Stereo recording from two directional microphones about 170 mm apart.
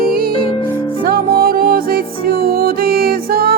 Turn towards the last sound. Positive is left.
turn(degrees=-60)  # may be behind; listen again after turning